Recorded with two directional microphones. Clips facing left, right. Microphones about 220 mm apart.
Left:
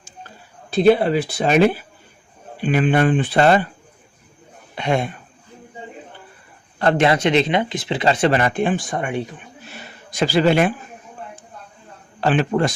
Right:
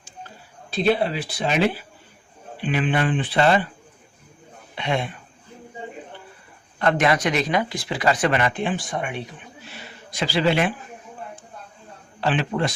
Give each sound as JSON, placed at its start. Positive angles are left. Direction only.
{"t": 0.7, "sound": "speech", "side_deg": 50}
{"t": 4.7, "sound": "speech", "side_deg": 45}
{"t": 6.7, "sound": "speech", "side_deg": 30}
{"t": 9.7, "sound": "a sound", "side_deg": 45}
{"t": 12.2, "sound": "speech", "side_deg": 45}